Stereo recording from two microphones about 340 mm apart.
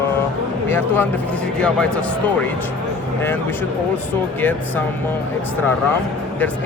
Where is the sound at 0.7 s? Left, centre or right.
Centre.